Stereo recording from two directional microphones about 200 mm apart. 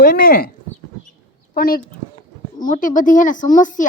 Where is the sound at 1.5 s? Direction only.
45° left (ahead or behind).